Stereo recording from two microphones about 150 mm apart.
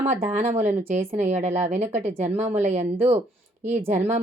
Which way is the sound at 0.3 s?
45° right (ahead or behind).